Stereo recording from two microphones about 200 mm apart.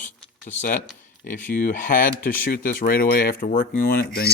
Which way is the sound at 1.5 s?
45° left (ahead or behind).